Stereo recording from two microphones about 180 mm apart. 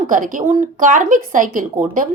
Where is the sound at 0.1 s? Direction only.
45° right (ahead or behind).